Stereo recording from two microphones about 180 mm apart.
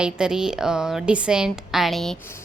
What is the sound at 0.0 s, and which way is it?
A woman's voice, 5° right (ahead or behind).